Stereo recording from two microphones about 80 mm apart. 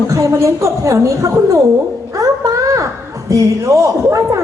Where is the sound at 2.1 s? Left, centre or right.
Right.